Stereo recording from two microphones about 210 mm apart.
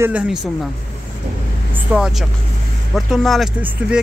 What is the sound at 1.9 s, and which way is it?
Speech, 5° right (ahead or behind).